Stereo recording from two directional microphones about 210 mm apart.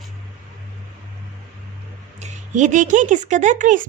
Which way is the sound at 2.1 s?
35° right (ahead or behind).